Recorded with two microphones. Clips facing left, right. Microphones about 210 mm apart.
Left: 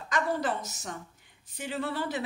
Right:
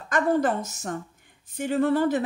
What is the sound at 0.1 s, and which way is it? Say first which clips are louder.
Speech: right 7 dB; 50° right (ahead or behind).